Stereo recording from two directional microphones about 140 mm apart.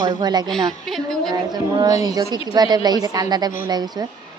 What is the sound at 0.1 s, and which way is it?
Speech, 30° right (ahead or behind).